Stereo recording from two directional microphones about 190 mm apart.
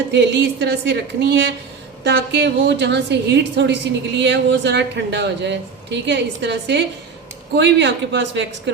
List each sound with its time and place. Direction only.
0.1 s a woman's voice: 65° right (ahead or behind)